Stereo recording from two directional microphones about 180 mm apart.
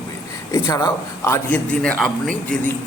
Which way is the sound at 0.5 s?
20° left (ahead or behind).